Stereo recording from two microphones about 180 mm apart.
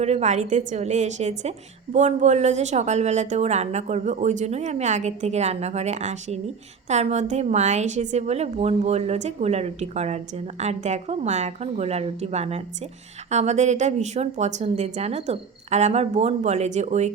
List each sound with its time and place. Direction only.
0.0 s a woman's voice: 40° right (ahead or behind)